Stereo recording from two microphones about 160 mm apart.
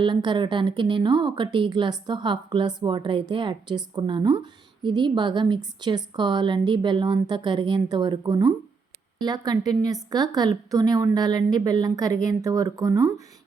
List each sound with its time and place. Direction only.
0.0 s a woman's voice: 30° right (ahead or behind)